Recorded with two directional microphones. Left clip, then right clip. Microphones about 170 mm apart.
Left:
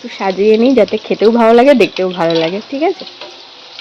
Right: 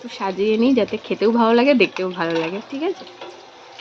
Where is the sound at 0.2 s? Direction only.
15° left (ahead or behind).